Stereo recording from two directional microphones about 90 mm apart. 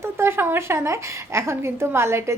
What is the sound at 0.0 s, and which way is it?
A woman's voice, 25° right (ahead or behind).